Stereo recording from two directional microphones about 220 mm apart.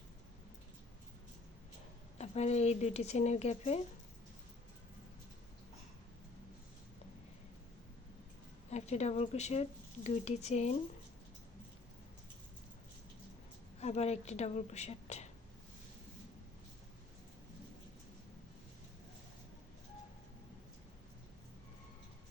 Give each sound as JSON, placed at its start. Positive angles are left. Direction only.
{"t": 2.1, "sound": "speech", "side_deg": 30}
{"t": 8.7, "sound": "speech", "side_deg": 30}
{"t": 13.7, "sound": "speech", "side_deg": 30}